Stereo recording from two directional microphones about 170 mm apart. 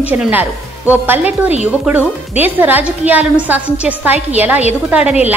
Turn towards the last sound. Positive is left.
turn(degrees=-10)  # may be behind; listen again after turning